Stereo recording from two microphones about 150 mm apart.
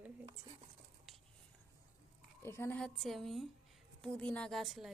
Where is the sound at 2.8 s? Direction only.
Centre (ahead or behind).